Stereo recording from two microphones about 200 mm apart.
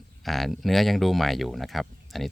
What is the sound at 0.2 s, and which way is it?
Speech, centre (ahead or behind).